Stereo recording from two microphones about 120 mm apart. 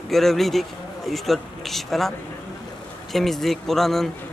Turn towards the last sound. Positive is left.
turn(degrees=0)  # may be behind; listen again after turning